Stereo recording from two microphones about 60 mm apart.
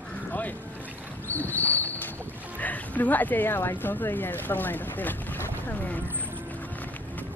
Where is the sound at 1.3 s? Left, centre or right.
Left.